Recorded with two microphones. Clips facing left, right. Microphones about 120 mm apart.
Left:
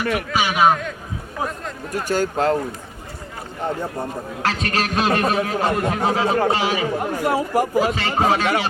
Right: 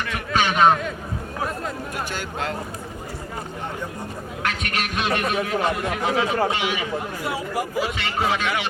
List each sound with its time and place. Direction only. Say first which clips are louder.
0.3 s a man's voice: right 1 dB; 10° left (ahead or behind)
1.9 s a man's voice: left 8 dB; 40° left (ahead or behind)
4.4 s a man's voice: left 5 dB; 35° left (ahead or behind)
7.0 s a man's voice: left 7 dB; 50° left (ahead or behind)